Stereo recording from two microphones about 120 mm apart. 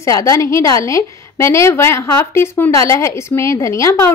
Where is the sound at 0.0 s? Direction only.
25° left (ahead or behind).